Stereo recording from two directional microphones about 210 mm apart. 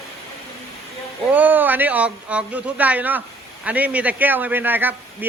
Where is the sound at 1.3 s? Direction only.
10° right (ahead or behind).